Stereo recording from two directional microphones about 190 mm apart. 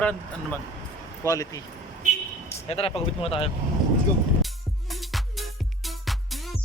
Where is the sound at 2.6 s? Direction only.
30° left (ahead or behind).